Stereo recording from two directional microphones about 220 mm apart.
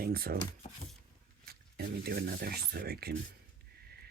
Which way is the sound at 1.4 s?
45° right (ahead or behind).